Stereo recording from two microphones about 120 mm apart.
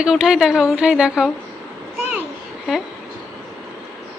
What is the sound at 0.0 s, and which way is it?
Speech, 5° right (ahead or behind).